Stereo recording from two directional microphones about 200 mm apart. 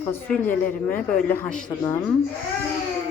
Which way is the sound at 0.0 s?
10° left (ahead or behind).